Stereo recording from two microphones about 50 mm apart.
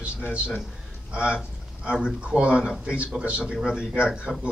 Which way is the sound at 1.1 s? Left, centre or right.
Right.